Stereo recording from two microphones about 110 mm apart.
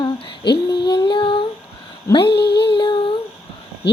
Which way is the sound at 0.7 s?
45° left (ahead or behind).